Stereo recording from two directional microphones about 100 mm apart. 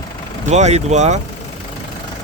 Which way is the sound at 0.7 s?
90° right.